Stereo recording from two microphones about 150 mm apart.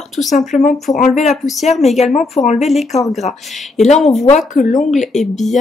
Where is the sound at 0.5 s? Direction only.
60° left (ahead or behind).